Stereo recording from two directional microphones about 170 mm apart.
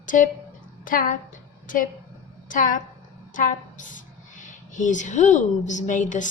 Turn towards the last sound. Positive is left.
turn(degrees=50)  # may be behind; listen again after turning